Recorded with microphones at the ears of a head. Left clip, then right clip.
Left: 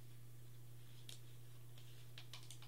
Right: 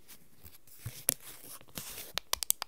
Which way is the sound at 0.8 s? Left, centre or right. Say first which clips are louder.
Right 19 dB; right.